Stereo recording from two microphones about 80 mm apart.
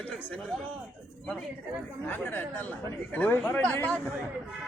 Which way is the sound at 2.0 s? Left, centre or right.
Left.